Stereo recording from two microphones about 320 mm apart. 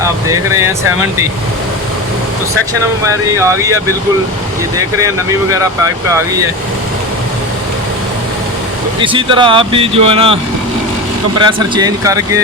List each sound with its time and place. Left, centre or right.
0.0 s speech: centre
3.4 s speech: centre
4.9 s speech: centre
9.0 s speech: centre
11.3 s speech: centre